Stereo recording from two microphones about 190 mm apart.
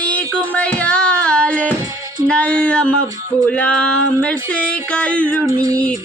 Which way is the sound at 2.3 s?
5° left (ahead or behind).